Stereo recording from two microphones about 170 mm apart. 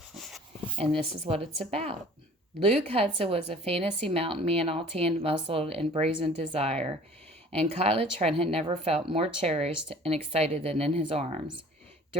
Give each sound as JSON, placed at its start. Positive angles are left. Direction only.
{"t": 0.8, "sound": "speech", "side_deg": -30}